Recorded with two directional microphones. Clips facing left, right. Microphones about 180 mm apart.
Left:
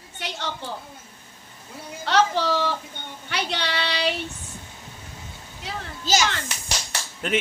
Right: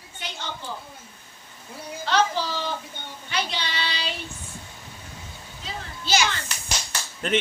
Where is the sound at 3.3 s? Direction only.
65° left (ahead or behind).